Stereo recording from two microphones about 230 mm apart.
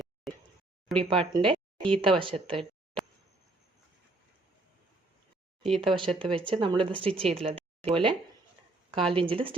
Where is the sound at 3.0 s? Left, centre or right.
Centre.